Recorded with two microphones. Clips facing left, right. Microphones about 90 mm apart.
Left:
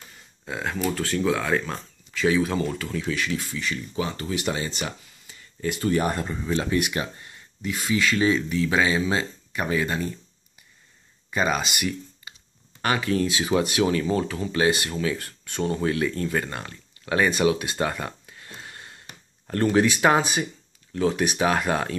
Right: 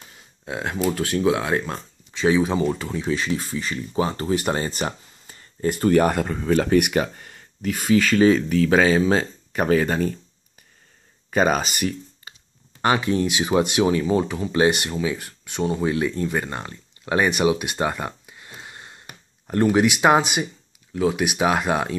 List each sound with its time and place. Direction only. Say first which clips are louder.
0.5 s speech: right 3 dB; 20° right (ahead or behind); by 5.9 s 40° right (ahead or behind)
5.9 s speech: right 6 dB; 55° right (ahead or behind)
11.3 s speech: right 5 dB; 40° right (ahead or behind)
12.8 s speech: right 3 dB; 20° right (ahead or behind)
14.9 s speech: right 2 dB; 10° right (ahead or behind)